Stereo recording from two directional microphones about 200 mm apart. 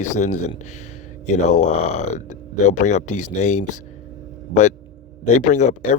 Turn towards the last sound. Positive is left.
turn(degrees=35)  # may be behind; listen again after turning